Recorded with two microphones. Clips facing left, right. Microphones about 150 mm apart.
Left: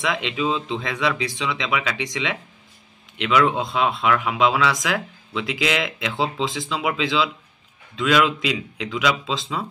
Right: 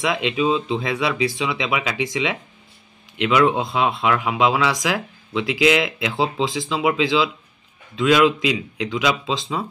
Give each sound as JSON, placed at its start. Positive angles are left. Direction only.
{"t": 0.0, "sound": "speech", "side_deg": -5}